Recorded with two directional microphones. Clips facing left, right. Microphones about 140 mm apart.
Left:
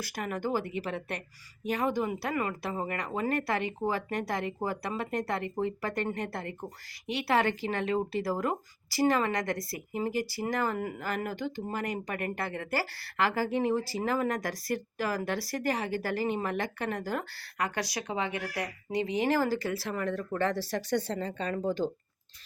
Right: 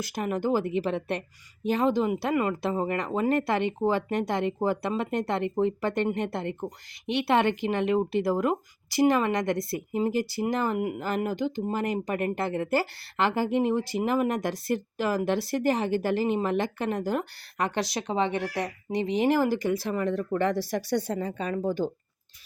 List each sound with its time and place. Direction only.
0.0 s speech: 25° right (ahead or behind); by 21.7 s 10° right (ahead or behind)